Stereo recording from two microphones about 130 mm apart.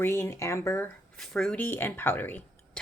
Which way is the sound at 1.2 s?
5° left (ahead or behind).